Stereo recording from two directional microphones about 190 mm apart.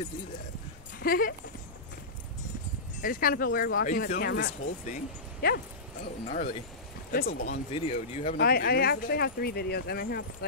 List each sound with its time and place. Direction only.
0.9 s speech: 50° left (ahead or behind)
3.0 s speech: 45° left (ahead or behind)
6.2 s speech: 45° left (ahead or behind)
7.7 s speech: 35° left (ahead or behind)
8.4 s speech: 55° left (ahead or behind)